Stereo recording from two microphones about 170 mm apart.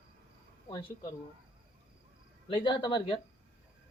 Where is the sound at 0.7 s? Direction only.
30° left (ahead or behind).